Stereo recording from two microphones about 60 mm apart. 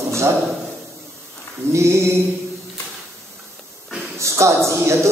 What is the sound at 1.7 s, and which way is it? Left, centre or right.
Speech, right.